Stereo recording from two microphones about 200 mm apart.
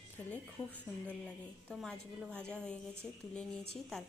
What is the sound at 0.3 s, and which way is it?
A woman's voice, 5° left (ahead or behind).